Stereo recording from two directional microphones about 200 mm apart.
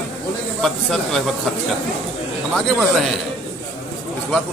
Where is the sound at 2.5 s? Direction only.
Centre (ahead or behind).